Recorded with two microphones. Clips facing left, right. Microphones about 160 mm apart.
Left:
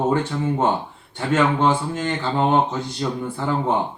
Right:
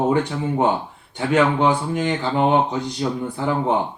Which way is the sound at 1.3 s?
15° right (ahead or behind).